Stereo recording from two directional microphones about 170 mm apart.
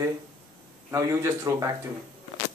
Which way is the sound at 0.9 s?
15° right (ahead or behind).